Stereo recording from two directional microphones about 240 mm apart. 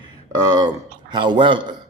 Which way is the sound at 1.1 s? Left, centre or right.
Centre.